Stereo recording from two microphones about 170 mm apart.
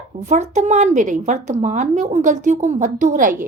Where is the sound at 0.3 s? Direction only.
45° right (ahead or behind).